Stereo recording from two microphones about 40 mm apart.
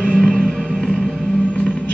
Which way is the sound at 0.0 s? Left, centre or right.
Centre.